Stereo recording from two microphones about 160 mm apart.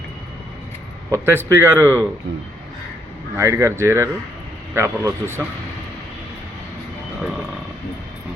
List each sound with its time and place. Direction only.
1.1 s speech: 15° right (ahead or behind)
3.3 s speech: 15° right (ahead or behind)